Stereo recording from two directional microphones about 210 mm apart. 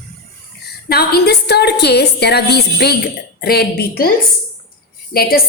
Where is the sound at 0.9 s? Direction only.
50° left (ahead or behind).